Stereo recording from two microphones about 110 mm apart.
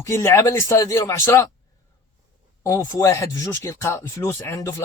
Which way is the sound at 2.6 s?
25° left (ahead or behind).